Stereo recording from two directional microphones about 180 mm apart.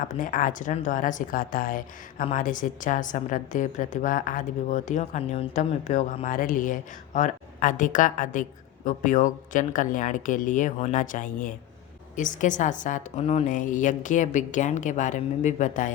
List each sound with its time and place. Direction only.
0.2 s a woman's voice: 50° left (ahead or behind)